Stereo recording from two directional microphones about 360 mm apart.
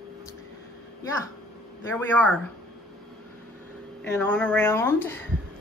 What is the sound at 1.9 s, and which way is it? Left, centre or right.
Speech, centre.